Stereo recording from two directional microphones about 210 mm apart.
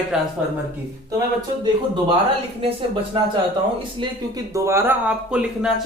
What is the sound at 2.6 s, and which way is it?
Speech, 25° right (ahead or behind).